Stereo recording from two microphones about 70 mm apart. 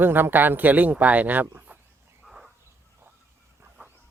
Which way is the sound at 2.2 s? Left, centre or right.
Centre.